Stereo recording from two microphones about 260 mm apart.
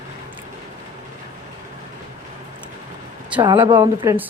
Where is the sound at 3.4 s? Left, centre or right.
Centre.